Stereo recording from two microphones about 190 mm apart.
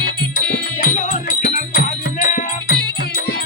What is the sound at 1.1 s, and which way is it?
Music, 40° left (ahead or behind).